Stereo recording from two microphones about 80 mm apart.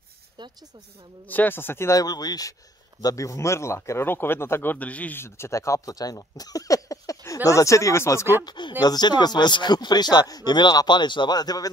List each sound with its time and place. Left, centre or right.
0.4 s speech: right
1.2 s speech: left
1.9 s speech: left; by 5.2 s centre
5.2 s speech: left
8.5 s speech: left
8.8 s speech: left